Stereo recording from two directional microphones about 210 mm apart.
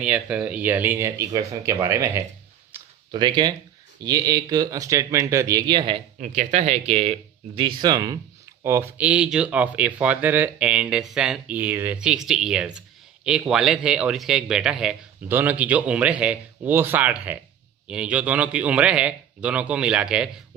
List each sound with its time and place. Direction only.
0.0 s speech: 5° right (ahead or behind)
2.7 s a sound: 10° right (ahead or behind)
3.1 s speech: 20° right (ahead or behind)
6.1 s speech: 35° right (ahead or behind); by 20.3 s 5° right (ahead or behind)